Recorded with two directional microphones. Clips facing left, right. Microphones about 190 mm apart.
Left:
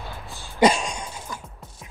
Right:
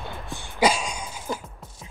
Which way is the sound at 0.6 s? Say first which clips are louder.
Left 3 dB; 5° right (ahead or behind).